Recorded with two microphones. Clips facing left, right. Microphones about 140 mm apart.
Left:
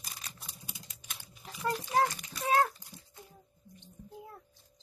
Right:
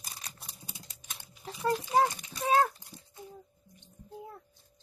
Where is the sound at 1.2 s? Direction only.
25° right (ahead or behind).